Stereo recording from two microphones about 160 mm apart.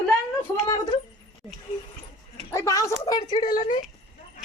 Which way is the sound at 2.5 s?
20° left (ahead or behind).